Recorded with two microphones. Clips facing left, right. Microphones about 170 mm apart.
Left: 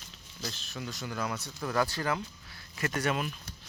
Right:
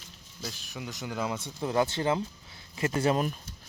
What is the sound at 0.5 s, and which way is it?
Speech, 15° right (ahead or behind).